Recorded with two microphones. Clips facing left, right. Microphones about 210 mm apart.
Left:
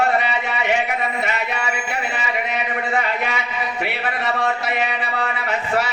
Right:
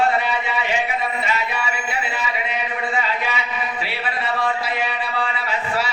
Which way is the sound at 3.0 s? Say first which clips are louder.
Left 1 dB; 60° left (ahead or behind).